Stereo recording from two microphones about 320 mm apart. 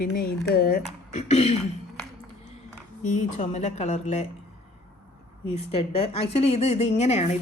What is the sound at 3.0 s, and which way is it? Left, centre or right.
A woman's voice, left.